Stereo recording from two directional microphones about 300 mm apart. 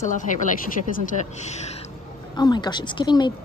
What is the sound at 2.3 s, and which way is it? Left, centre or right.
Speech, centre.